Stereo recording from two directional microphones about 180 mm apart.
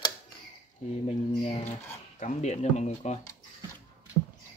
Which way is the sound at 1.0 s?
30° left (ahead or behind).